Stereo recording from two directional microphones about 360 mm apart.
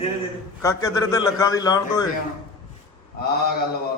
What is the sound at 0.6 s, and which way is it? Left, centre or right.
A man's voice, centre.